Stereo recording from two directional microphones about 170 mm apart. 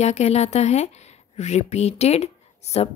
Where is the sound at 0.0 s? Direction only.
40° left (ahead or behind).